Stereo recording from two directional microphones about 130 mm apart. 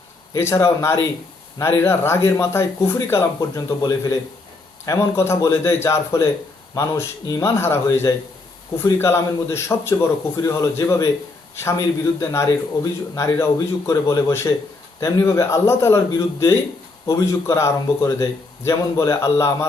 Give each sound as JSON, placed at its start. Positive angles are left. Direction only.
{"t": 0.3, "sound": "speech", "side_deg": 20}
{"t": 12.2, "sound": "speech", "side_deg": 20}